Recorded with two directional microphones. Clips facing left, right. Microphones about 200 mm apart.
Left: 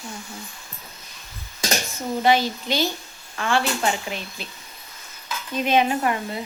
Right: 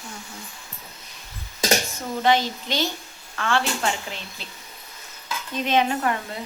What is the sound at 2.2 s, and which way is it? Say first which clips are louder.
Speech: left 1 dB; 10° left (ahead or behind).